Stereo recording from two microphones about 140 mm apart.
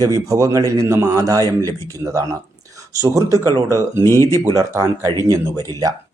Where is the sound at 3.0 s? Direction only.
25° right (ahead or behind).